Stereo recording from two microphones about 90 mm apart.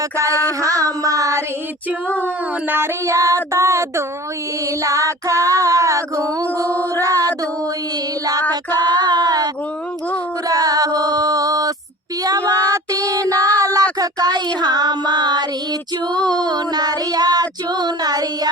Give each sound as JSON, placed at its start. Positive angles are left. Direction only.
{"t": 0.6, "sound": "child singing", "side_deg": -40}
{"t": 2.2, "sound": "child singing", "side_deg": -25}
{"t": 6.7, "sound": "mantra", "side_deg": 20}
{"t": 7.0, "sound": "mantra", "side_deg": -40}
{"t": 8.9, "sound": "a sound", "side_deg": -50}
{"t": 10.5, "sound": "music", "side_deg": -45}
{"t": 12.2, "sound": "child singing", "side_deg": -40}
{"t": 13.6, "sound": "a sound", "side_deg": -40}
{"t": 14.0, "sound": "child singing", "side_deg": -45}